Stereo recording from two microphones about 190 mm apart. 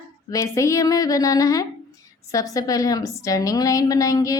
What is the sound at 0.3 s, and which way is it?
Speech, 15° left (ahead or behind).